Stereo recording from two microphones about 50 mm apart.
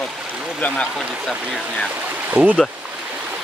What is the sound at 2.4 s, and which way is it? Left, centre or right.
Speech, right.